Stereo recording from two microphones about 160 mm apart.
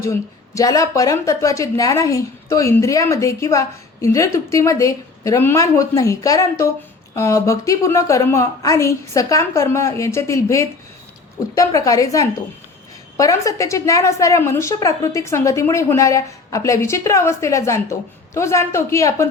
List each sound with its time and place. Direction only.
0.0 s speech: 20° left (ahead or behind)